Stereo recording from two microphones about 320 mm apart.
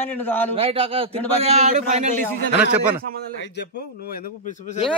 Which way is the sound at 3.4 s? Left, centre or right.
Left.